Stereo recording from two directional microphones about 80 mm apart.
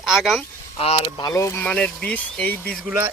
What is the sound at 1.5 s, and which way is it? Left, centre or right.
Speech, centre.